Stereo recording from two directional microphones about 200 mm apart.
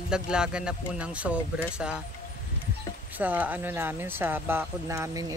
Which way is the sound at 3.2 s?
10° right (ahead or behind).